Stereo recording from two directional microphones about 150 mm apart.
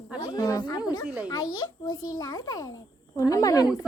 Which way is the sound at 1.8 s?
25° left (ahead or behind).